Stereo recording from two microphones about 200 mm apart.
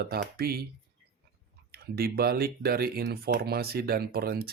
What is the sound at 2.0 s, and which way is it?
Speech, 50° right (ahead or behind).